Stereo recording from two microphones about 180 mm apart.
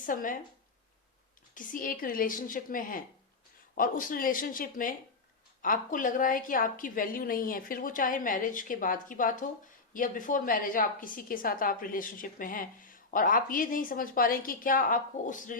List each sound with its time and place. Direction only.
0.0 s a woman's voice: 50° left (ahead or behind)
1.5 s a woman's voice: 50° left (ahead or behind)